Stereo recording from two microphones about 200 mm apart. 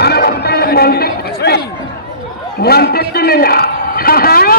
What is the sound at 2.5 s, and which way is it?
A man's voice, 50° left (ahead or behind).